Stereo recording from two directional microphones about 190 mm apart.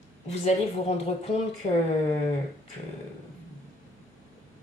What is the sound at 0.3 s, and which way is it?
Speech, 35° left (ahead or behind).